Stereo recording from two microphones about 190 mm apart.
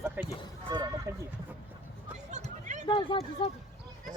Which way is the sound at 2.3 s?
40° right (ahead or behind).